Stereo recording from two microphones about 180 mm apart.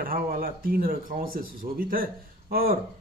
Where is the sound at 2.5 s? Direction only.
55° right (ahead or behind).